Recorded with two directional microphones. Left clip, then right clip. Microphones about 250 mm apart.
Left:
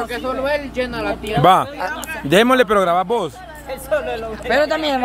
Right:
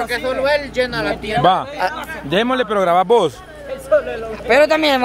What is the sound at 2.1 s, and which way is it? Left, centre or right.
Speech, left.